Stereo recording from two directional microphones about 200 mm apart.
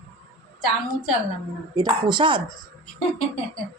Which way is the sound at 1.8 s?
20° right (ahead or behind).